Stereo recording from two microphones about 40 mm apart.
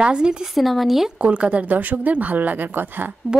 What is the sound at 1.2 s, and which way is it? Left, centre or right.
Speech, right.